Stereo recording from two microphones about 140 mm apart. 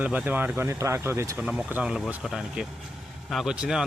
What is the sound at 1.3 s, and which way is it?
Speech, 10° right (ahead or behind).